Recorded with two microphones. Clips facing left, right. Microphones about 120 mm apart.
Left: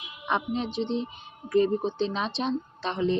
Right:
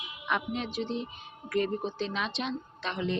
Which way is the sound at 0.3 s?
30° left (ahead or behind).